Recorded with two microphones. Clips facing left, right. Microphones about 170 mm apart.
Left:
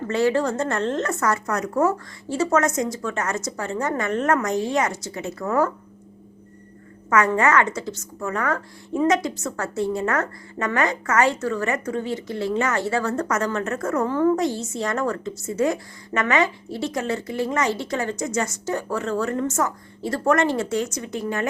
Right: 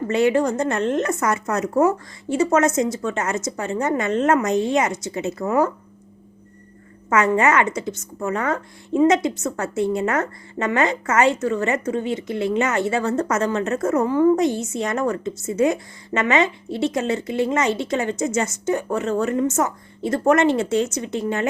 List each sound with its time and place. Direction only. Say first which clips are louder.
0.1 s a woman's voice: right 2 dB; 20° right (ahead or behind)
7.1 s a woman's voice: right 1 dB; 20° right (ahead or behind)